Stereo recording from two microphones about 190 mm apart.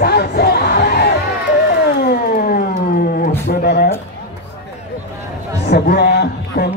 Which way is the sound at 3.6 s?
60° left (ahead or behind).